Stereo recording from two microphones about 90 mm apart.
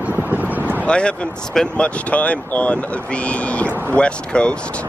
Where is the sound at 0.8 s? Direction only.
10° left (ahead or behind).